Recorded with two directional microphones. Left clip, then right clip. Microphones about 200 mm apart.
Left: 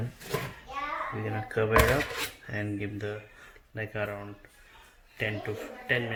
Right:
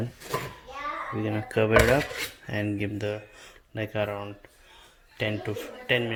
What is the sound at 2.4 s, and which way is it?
Speech, 35° right (ahead or behind).